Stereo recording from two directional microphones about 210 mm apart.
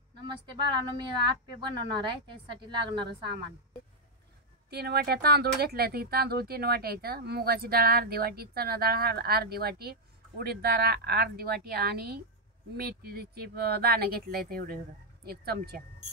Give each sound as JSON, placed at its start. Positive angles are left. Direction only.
{"t": 0.3, "sound": "a woman's voice", "side_deg": -20}
{"t": 4.6, "sound": "speech", "side_deg": -50}